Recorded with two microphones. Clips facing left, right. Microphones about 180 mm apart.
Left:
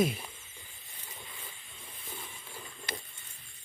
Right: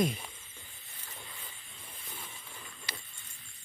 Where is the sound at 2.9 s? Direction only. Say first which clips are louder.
Left 6 dB; 50° left (ahead or behind).